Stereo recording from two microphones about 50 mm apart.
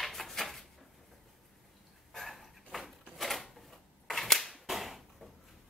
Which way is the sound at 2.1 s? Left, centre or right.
Centre.